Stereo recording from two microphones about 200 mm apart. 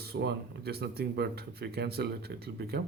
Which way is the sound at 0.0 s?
55° right (ahead or behind).